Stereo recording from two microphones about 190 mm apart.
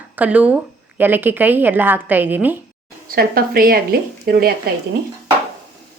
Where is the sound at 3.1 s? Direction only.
50° right (ahead or behind).